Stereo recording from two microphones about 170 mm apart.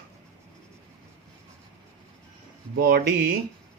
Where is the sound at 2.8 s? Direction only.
60° right (ahead or behind).